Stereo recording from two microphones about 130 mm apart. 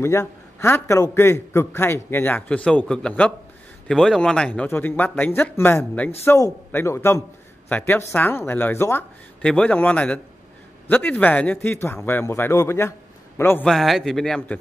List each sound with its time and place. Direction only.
0.0 s a man's voice: 20° left (ahead or behind)
13.7 s speech: centre (ahead or behind)